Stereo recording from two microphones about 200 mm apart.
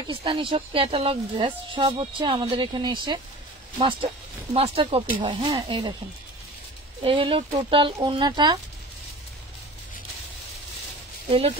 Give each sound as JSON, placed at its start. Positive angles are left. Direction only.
{"t": 0.0, "sound": "speech", "side_deg": -25}
{"t": 7.0, "sound": "speech", "side_deg": -25}
{"t": 11.2, "sound": "speech", "side_deg": -30}